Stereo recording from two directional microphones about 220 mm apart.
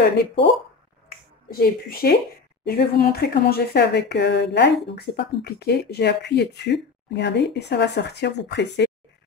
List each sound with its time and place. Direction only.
1.0 s finger snapping: 40° left (ahead or behind)
2.6 s speech: 45° left (ahead or behind)